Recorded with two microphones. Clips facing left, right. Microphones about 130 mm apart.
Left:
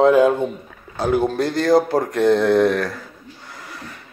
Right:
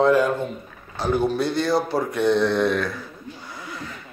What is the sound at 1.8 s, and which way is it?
Speech, 50° left (ahead or behind).